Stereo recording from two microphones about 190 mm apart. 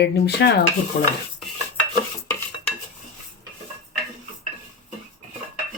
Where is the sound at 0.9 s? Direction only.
50° left (ahead or behind).